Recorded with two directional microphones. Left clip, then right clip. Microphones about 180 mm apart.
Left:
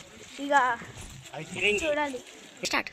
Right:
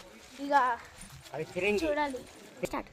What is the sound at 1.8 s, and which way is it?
Speech, 40° left (ahead or behind).